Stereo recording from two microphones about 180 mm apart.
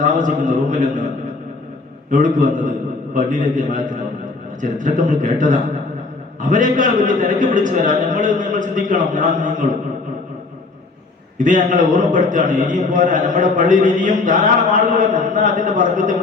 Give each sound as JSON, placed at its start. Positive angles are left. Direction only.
{"t": 0.0, "sound": "a man's voice", "side_deg": -45}
{"t": 2.0, "sound": "a man's voice", "side_deg": -45}
{"t": 11.3, "sound": "a man's voice", "side_deg": -45}